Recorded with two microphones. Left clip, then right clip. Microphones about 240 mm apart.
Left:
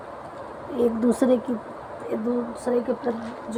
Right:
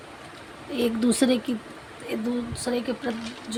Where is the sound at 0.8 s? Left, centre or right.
Right.